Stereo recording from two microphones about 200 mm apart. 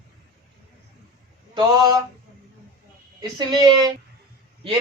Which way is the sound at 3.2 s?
20° right (ahead or behind).